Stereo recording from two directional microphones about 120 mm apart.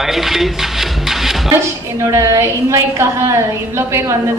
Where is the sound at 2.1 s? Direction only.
25° right (ahead or behind).